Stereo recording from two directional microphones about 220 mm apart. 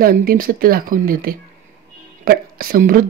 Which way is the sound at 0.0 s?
40° right (ahead or behind).